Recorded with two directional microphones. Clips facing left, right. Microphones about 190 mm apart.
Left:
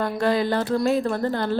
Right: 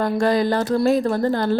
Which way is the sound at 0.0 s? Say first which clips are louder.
Right 3 dB; 40° right (ahead or behind).